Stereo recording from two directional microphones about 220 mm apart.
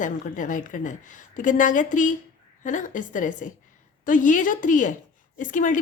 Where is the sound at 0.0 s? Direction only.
35° left (ahead or behind).